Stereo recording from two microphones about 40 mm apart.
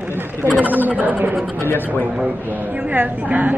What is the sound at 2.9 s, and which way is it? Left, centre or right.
Speech, right.